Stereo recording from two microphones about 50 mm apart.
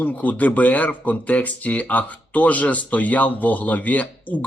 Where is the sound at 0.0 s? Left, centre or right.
Left.